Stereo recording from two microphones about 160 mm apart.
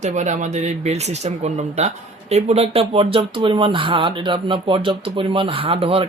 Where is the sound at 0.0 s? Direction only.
50° right (ahead or behind).